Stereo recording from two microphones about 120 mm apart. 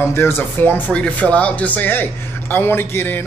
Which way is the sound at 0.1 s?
20° left (ahead or behind).